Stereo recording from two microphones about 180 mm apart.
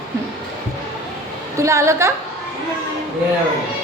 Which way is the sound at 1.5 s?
15° right (ahead or behind).